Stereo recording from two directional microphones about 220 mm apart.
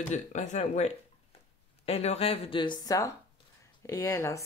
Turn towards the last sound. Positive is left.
turn(degrees=15)  # may be behind; listen again after turning